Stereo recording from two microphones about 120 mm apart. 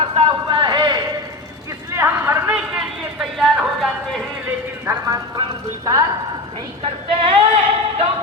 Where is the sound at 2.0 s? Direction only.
20° right (ahead or behind).